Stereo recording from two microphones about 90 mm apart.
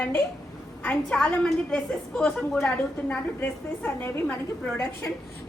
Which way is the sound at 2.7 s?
20° left (ahead or behind).